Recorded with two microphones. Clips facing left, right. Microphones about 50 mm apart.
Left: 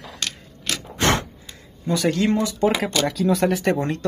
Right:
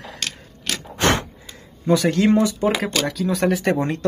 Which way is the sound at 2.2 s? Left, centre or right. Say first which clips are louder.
Right 2 dB; centre.